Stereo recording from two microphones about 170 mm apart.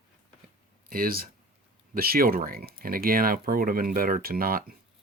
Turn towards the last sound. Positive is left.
turn(degrees=-60)  # may be behind; listen again after turning